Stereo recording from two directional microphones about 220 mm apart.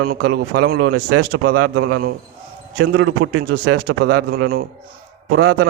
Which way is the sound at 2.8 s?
60° right (ahead or behind).